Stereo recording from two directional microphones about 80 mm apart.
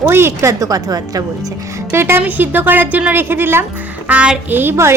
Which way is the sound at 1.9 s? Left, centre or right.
Right.